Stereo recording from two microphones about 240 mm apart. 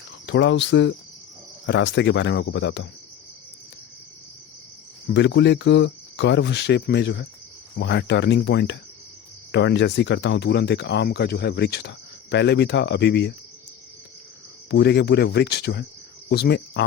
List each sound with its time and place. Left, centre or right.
0.3 s speech: left
5.1 s speech: left
14.7 s speech: left